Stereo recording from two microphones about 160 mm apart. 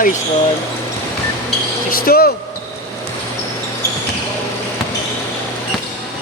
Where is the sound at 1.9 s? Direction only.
70° left (ahead or behind).